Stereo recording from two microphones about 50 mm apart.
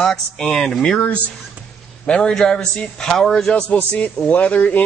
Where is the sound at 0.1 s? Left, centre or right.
Centre.